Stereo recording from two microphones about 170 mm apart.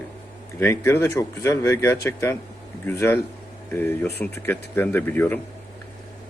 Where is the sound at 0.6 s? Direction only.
15° left (ahead or behind).